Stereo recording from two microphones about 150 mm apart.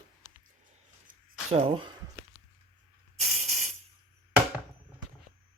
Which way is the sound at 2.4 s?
35° left (ahead or behind).